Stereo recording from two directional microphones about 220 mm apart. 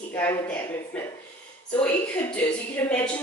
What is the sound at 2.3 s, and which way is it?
Speech, 5° left (ahead or behind).